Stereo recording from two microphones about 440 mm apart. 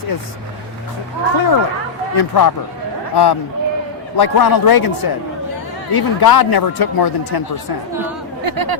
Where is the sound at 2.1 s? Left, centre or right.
Left.